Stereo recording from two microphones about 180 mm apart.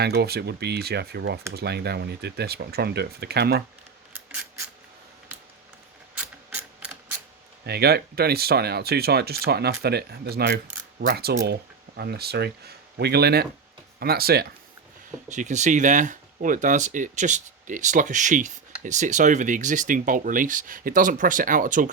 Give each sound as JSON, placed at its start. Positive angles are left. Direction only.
{"t": 0.0, "sound": "speech", "side_deg": -65}
{"t": 6.1, "sound": "ratchet", "side_deg": -10}
{"t": 7.6, "sound": "speech", "side_deg": -65}
{"t": 15.3, "sound": "speech", "side_deg": -40}